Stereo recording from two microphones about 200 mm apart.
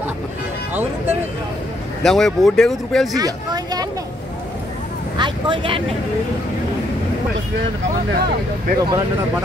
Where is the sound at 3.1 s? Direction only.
20° right (ahead or behind).